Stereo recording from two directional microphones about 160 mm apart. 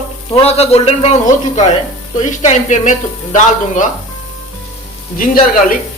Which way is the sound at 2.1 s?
50° left (ahead or behind).